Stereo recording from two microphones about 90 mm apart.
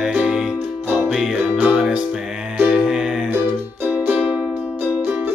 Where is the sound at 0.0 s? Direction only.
5° right (ahead or behind).